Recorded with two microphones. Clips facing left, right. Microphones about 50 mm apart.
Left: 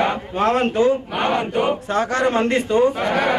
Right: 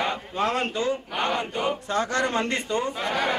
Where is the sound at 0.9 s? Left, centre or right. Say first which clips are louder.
Left 7 dB; centre.